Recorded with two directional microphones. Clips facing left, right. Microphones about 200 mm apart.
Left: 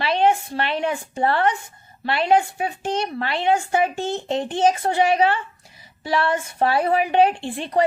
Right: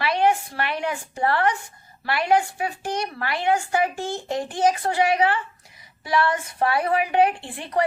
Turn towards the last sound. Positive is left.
turn(degrees=25)  # may be behind; listen again after turning